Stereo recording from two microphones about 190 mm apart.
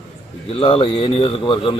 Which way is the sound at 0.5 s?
30° left (ahead or behind).